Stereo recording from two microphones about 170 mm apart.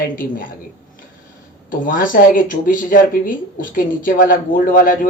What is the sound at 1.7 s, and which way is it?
Speech, 55° left (ahead or behind).